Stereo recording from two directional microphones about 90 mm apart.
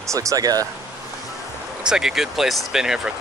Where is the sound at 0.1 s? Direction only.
40° right (ahead or behind).